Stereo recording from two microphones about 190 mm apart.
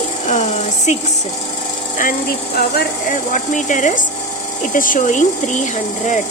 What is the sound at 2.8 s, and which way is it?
Speech, 45° left (ahead or behind).